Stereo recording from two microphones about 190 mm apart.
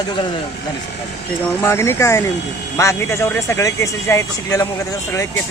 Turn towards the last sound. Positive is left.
turn(degrees=15)  # may be behind; listen again after turning